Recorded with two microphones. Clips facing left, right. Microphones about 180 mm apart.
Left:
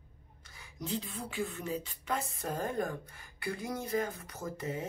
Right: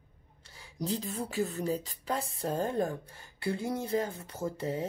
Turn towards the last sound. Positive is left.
turn(degrees=-30)  # may be behind; listen again after turning